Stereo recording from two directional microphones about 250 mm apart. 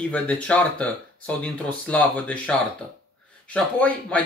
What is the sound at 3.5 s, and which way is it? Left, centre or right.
Speech, centre.